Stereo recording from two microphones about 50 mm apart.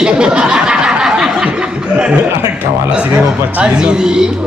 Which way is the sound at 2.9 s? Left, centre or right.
Right.